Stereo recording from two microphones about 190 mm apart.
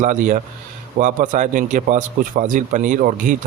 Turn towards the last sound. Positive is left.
turn(degrees=-45)  # may be behind; listen again after turning